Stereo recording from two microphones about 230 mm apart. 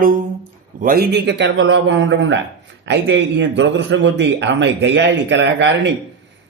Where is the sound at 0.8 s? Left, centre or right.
Right.